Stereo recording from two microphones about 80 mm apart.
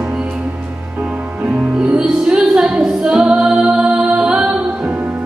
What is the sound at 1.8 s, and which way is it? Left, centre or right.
Music, centre.